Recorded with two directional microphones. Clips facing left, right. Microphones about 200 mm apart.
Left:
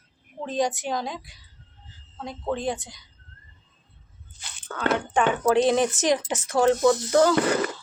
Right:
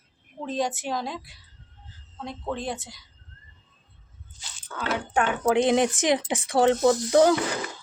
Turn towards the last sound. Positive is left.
turn(degrees=60)  # may be behind; listen again after turning